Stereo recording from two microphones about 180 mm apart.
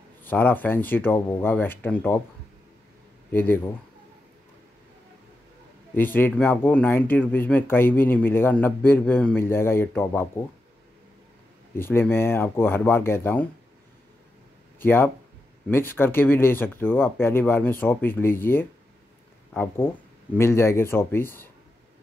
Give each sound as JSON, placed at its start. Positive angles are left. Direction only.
{"t": 0.2, "sound": "speech", "side_deg": 10}
{"t": 3.3, "sound": "speech", "side_deg": 10}
{"t": 5.9, "sound": "speech", "side_deg": 10}
{"t": 11.7, "sound": "speech", "side_deg": 10}
{"t": 14.8, "sound": "speech", "side_deg": 10}